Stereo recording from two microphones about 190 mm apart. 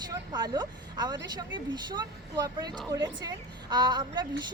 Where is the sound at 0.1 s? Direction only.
20° right (ahead or behind).